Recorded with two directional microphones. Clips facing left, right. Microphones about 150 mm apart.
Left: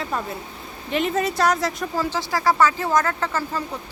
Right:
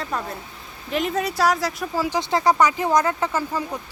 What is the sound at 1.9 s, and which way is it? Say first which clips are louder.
Speech: right 4 dB; 20° right (ahead or behind).